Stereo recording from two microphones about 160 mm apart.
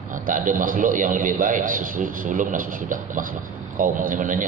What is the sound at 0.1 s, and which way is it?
A man's voice, 55° right (ahead or behind).